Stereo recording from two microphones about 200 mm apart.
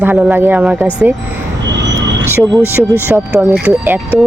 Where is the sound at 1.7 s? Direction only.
60° right (ahead or behind).